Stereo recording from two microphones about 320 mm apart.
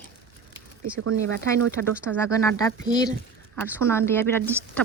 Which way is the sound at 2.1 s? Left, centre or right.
Centre.